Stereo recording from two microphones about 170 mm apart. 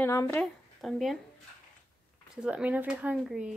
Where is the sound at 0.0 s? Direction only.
15° left (ahead or behind).